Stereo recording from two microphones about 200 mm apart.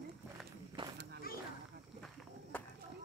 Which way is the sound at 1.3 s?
50° left (ahead or behind).